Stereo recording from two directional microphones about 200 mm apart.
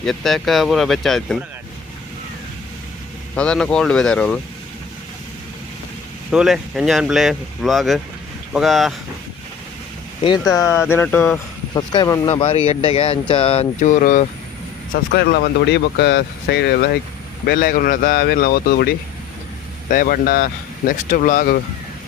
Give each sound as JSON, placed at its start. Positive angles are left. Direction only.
{"t": 0.0, "sound": "speech", "side_deg": 0}
{"t": 3.3, "sound": "speech", "side_deg": 5}
{"t": 6.3, "sound": "speech", "side_deg": -5}
{"t": 10.2, "sound": "speech", "side_deg": 20}
{"t": 12.3, "sound": "speech", "side_deg": 30}
{"t": 14.9, "sound": "speech", "side_deg": 50}